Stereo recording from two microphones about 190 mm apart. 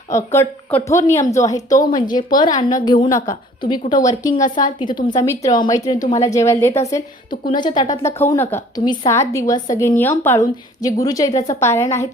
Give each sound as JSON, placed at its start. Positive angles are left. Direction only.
{"t": 0.1, "sound": "a woman's voice", "side_deg": 15}
{"t": 4.4, "sound": "a woman's voice", "side_deg": 45}
{"t": 5.1, "sound": "a woman's voice", "side_deg": 15}
{"t": 7.3, "sound": "a woman's voice", "side_deg": 25}